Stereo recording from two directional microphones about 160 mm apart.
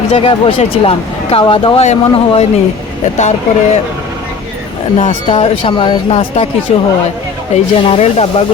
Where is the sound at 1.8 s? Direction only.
45° left (ahead or behind).